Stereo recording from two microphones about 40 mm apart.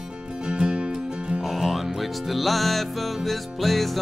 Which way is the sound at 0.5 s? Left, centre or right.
Right.